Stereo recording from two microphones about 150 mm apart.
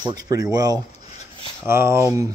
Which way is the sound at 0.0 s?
25° right (ahead or behind).